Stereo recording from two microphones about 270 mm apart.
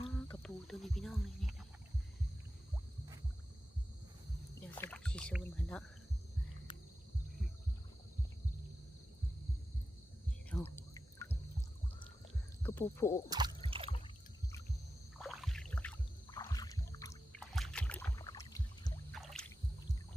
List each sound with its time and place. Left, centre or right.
0.2 s wild animals: centre
4.6 s rowboat: centre
10.5 s a sound: centre
12.6 s speech: centre
13.3 s a sound: centre
15.2 s rowboat: centre
16.2 s rowboat: centre
17.5 s rowboat: centre
19.1 s rowboat: centre